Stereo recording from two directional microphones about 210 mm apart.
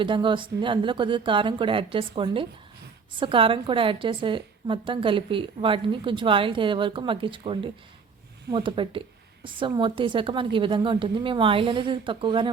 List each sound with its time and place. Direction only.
0.0 s a woman's voice: 25° right (ahead or behind)